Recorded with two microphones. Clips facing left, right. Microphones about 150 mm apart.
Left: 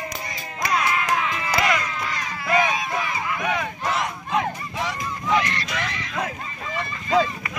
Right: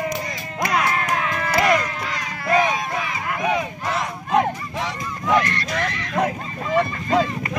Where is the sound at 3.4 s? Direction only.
30° right (ahead or behind).